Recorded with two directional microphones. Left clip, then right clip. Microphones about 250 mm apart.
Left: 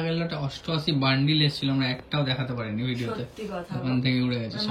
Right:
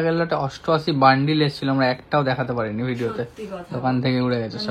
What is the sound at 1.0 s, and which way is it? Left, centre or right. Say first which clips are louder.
Speech: right 8 dB; right.